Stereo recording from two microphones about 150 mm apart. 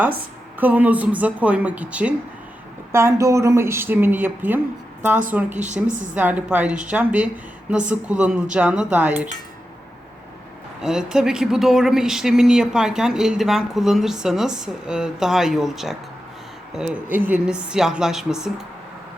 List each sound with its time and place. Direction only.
0.6 s a woman's voice: 10° right (ahead or behind)
5.5 s a woman's voice: 55° right (ahead or behind)
6.1 s a woman's voice: 10° right (ahead or behind)
10.8 s speech: 5° right (ahead or behind)